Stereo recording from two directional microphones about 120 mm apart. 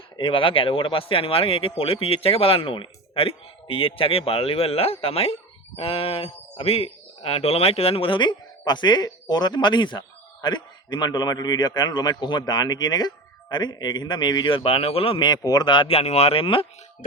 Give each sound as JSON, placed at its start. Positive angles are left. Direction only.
{"t": 0.2, "sound": "a man's voice", "side_deg": 45}
{"t": 15.9, "sound": "speech", "side_deg": 60}